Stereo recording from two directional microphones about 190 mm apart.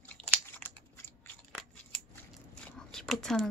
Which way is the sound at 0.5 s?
10° left (ahead or behind).